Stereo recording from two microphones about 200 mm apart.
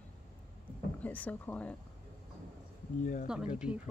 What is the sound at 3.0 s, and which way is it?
Speech, 40° left (ahead or behind).